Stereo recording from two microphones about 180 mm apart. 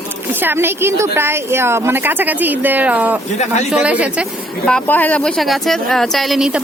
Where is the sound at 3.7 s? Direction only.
5° right (ahead or behind).